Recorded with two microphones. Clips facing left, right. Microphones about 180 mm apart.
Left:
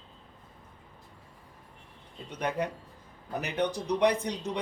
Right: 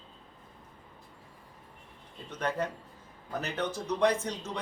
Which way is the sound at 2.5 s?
15° left (ahead or behind).